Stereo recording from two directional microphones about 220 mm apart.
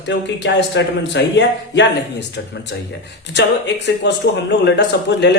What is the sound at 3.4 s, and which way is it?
Speech, 50° left (ahead or behind).